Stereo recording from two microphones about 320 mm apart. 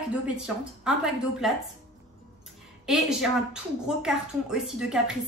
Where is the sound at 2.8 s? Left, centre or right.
Centre.